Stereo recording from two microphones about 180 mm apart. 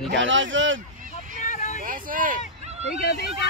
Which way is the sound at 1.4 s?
40° left (ahead or behind).